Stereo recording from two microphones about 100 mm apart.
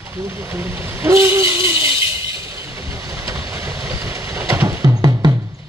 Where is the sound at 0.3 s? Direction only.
25° right (ahead or behind).